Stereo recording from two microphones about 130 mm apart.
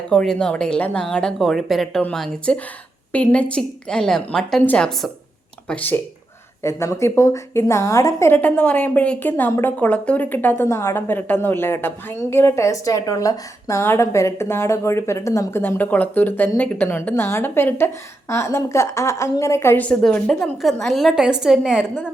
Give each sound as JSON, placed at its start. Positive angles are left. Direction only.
{"t": 0.1, "sound": "a woman's voice", "side_deg": 5}
{"t": 6.6, "sound": "a woman's voice", "side_deg": 20}